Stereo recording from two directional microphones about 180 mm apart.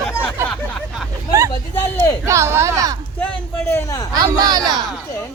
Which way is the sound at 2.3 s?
15° right (ahead or behind).